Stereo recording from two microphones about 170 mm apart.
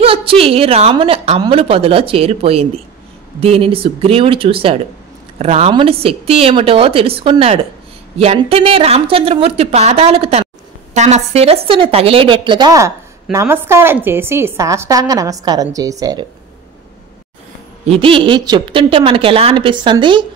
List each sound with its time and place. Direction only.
0.0 s a woman's voice: 35° right (ahead or behind)
17.8 s a woman's voice: 35° right (ahead or behind)